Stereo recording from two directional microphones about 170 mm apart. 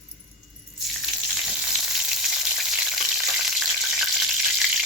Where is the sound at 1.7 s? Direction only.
Centre (ahead or behind).